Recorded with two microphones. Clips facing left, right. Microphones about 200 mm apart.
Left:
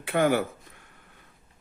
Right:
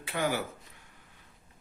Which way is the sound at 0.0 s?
55° left (ahead or behind).